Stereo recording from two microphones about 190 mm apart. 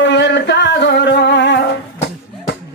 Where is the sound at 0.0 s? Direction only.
70° left (ahead or behind).